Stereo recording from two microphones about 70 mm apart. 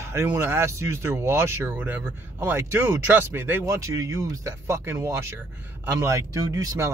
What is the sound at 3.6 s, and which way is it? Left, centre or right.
Speech, right.